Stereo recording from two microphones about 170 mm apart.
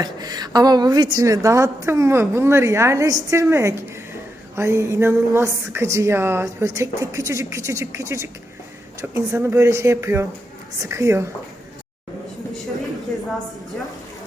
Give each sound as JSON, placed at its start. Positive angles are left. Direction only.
{"t": 0.0, "sound": "a woman's voice", "side_deg": -25}